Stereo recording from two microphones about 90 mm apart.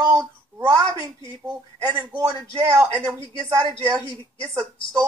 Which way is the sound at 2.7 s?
35° right (ahead or behind).